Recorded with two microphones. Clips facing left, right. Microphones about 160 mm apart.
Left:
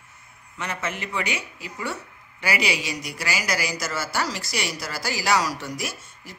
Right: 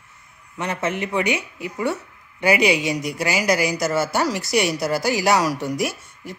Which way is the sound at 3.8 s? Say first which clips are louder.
Right 7 dB; 20° right (ahead or behind).